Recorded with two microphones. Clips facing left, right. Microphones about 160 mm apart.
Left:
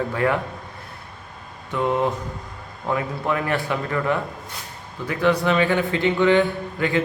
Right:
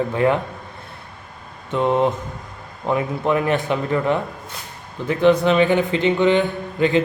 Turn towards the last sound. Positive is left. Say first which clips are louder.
# right 4 dB
turn(degrees=-20)  # may be behind; listen again after turning